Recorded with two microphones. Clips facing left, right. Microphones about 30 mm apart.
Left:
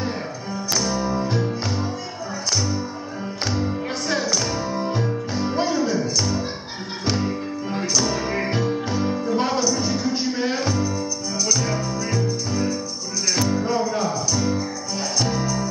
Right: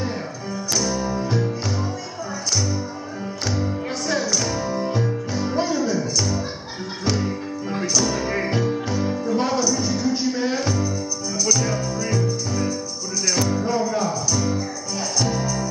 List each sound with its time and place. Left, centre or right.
0.7 s music: centre
3.4 s music: centre